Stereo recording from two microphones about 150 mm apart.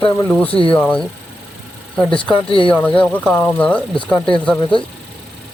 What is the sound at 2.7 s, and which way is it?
Speech, 10° left (ahead or behind).